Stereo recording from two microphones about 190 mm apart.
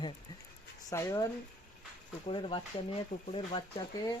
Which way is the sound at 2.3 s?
25° left (ahead or behind).